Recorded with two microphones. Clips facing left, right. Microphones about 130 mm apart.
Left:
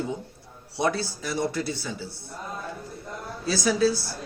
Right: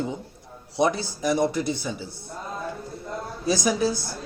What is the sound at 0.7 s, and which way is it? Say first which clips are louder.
A man's voice: right 3 dB; 15° right (ahead or behind).